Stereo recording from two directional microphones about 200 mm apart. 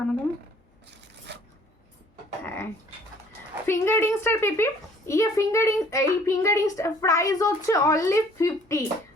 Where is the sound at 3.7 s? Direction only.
15° left (ahead or behind).